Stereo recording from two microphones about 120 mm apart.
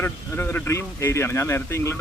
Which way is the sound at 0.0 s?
15° left (ahead or behind).